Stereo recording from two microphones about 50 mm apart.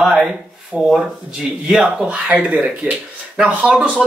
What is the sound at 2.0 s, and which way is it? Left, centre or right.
Speech, right.